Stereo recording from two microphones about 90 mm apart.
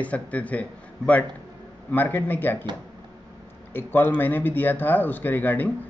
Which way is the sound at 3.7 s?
25° left (ahead or behind).